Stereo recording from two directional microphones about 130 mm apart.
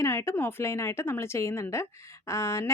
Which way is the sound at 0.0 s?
20° left (ahead or behind).